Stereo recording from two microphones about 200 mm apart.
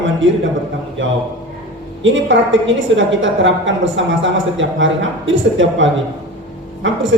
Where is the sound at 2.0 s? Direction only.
70° right (ahead or behind).